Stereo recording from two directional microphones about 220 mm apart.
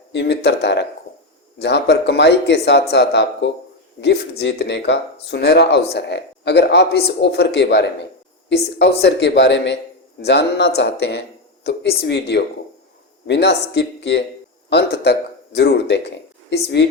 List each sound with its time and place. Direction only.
0.1 s speech: 50° left (ahead or behind)